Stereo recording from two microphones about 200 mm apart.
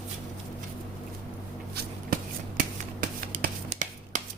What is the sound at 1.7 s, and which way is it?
Shuffling cards, 50° right (ahead or behind).